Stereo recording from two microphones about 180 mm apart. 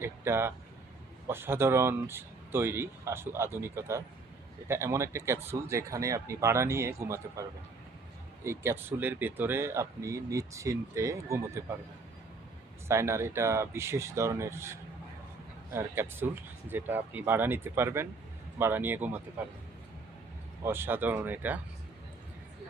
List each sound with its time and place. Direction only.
0.0 s speech: 15° right (ahead or behind)
8.4 s speech: 15° right (ahead or behind)
12.9 s speech: 15° right (ahead or behind)
20.7 s speech: 10° right (ahead or behind)